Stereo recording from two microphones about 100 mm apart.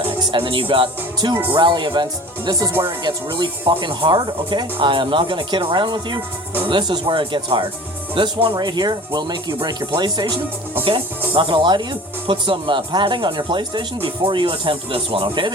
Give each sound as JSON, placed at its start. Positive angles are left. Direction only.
{"t": 0.3, "sound": "speech", "side_deg": -60}
{"t": 1.2, "sound": "speech", "side_deg": -50}
{"t": 8.5, "sound": "speech", "side_deg": -45}
{"t": 11.3, "sound": "speech", "side_deg": -55}